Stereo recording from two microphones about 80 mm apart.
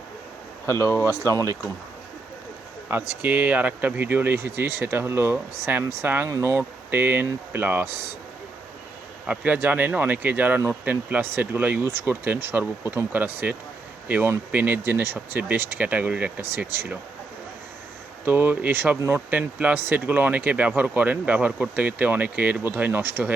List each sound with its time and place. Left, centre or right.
0.7 s speech: left
2.9 s speech: right
9.2 s speech: centre
18.3 s speech: right